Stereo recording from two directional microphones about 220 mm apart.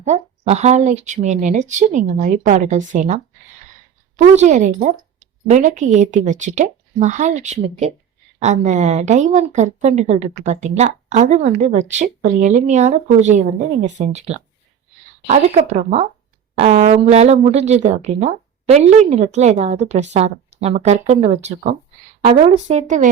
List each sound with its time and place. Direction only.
0.0 s a woman's voice: 30° right (ahead or behind)
4.2 s a woman's voice: 30° right (ahead or behind)